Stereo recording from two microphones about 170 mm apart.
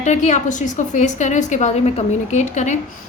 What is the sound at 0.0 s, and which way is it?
A woman's voice, 45° left (ahead or behind).